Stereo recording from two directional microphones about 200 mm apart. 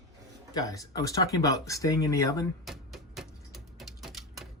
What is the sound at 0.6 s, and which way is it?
Speech, 15° left (ahead or behind).